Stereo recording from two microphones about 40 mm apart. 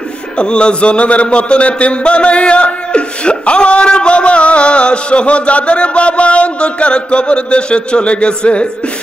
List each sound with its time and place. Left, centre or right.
0.4 s a man's voice: left